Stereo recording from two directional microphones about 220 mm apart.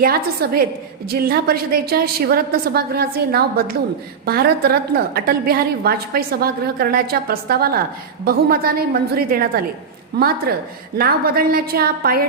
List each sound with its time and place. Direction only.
0.0 s a woman's voice: 45° right (ahead or behind)